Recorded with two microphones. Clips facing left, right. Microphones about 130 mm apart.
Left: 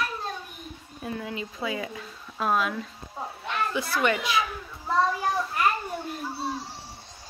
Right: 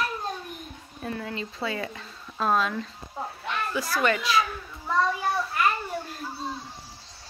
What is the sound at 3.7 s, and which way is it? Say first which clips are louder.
Speech: right 1 dB; 20° left (ahead or behind).